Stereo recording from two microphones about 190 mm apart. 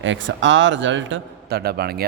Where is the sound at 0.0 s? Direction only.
75° right (ahead or behind).